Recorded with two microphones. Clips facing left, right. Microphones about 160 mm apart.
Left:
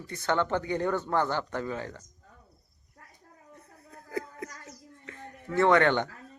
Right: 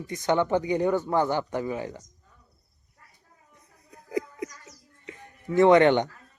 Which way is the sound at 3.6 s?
15° right (ahead or behind).